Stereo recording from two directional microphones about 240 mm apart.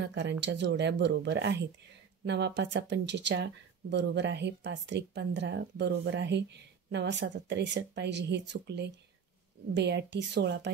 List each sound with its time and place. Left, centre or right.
0.0 s speech: right